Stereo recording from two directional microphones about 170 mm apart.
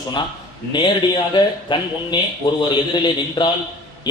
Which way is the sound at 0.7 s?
25° left (ahead or behind).